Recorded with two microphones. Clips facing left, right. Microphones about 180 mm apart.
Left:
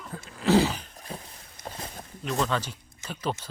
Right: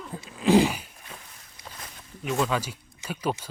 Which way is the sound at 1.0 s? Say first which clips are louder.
Left 6 dB; 35° left (ahead or behind).